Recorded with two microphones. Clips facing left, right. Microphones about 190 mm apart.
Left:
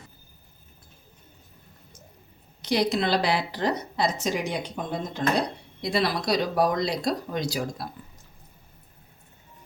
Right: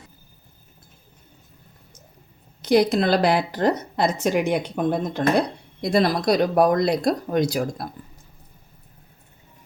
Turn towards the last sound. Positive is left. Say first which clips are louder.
# right 7 dB
turn(degrees=-55)  # may be behind; listen again after turning